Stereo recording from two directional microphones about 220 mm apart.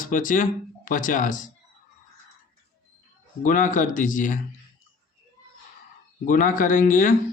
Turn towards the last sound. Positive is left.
turn(degrees=40)  # may be behind; listen again after turning